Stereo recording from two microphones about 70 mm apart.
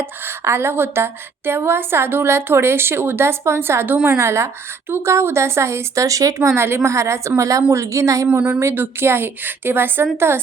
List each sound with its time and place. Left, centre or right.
0.0 s a woman's voice: right
6.5 s a woman's voice: right
8.3 s a woman's voice: right